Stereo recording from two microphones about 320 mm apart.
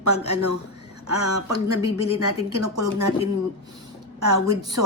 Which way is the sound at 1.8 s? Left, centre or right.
Centre.